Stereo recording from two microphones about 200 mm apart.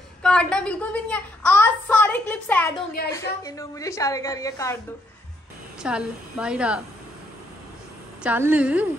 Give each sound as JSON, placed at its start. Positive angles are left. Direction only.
{"t": 0.2, "sound": "a woman's voice", "side_deg": 5}
{"t": 5.8, "sound": "a woman's voice", "side_deg": -5}
{"t": 8.2, "sound": "a woman's voice", "side_deg": -10}